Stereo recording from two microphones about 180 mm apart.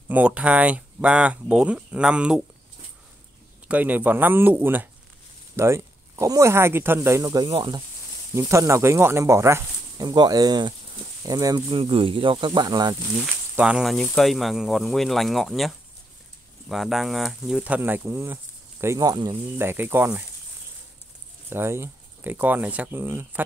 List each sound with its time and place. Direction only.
0.1 s speech: 10° right (ahead or behind)
3.6 s speech: 10° right (ahead or behind); by 7.8 s 25° right (ahead or behind)
8.4 s speech: 15° right (ahead or behind)
13.6 s speech: 5° right (ahead or behind)
21.5 s speech: 15° right (ahead or behind)